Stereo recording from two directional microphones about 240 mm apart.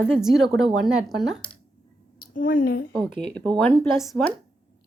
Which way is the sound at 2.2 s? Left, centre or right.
Left.